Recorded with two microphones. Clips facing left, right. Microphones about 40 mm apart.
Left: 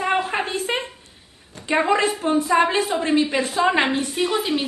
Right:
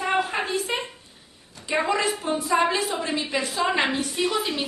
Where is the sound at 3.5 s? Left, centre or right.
Centre.